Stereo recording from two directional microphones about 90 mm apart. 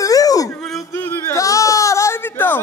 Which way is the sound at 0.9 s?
25° left (ahead or behind).